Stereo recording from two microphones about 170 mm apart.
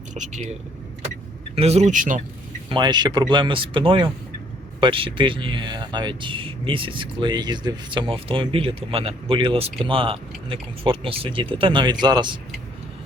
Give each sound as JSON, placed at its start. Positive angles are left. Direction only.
{"t": 0.1, "sound": "speech", "side_deg": -45}
{"t": 1.5, "sound": "speech", "side_deg": -40}
{"t": 2.6, "sound": "speech", "side_deg": -25}